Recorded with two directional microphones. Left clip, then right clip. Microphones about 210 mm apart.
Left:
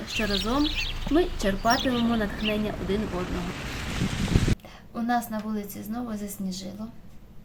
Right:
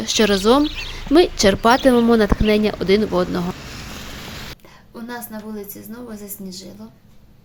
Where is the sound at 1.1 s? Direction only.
45° right (ahead or behind).